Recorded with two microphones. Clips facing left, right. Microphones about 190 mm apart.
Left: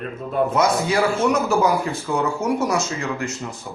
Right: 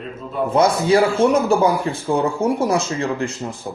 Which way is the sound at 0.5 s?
30° right (ahead or behind).